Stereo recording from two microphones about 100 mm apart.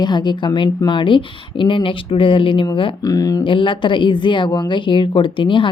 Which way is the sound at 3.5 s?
55° left (ahead or behind).